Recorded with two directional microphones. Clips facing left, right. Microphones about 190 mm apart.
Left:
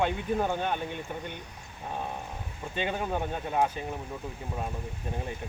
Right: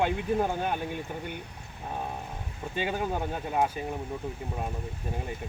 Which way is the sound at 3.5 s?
10° right (ahead or behind).